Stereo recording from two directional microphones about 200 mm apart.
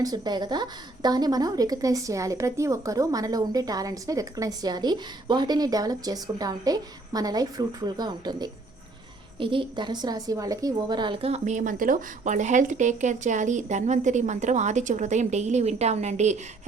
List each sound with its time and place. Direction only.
0.0 s a woman's voice: 20° right (ahead or behind)